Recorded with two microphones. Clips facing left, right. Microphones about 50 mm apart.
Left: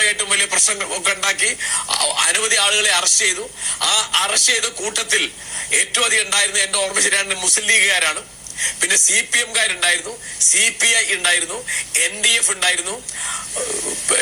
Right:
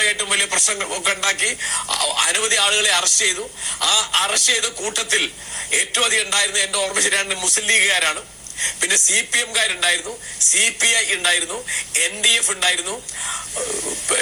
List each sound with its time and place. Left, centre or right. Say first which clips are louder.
0.0 s a man's voice: left 1 dB; left